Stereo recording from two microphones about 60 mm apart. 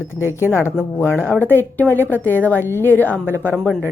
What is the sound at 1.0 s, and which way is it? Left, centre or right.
Speech, centre.